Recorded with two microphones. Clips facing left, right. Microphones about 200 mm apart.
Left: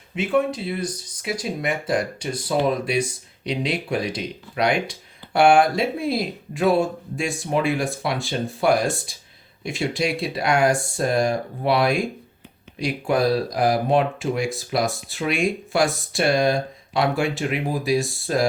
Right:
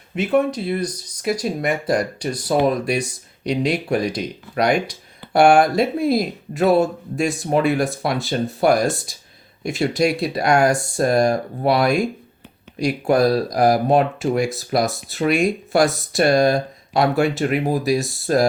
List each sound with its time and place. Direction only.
0.2 s speech: 40° right (ahead or behind)